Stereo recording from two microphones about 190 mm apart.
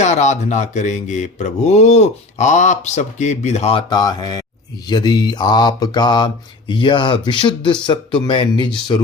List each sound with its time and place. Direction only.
0.0 s speech: 35° left (ahead or behind); by 4.4 s 20° left (ahead or behind)
4.9 s mantra: 20° left (ahead or behind)